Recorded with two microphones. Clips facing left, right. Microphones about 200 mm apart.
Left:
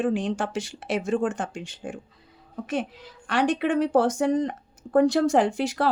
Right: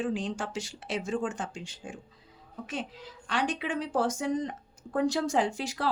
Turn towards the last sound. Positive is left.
turn(degrees=65)  # may be behind; listen again after turning